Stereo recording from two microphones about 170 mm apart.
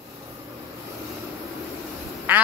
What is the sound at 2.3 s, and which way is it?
Quack, 10° right (ahead or behind).